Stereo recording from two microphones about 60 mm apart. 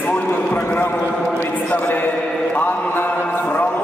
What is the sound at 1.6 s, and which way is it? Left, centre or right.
Speech, left.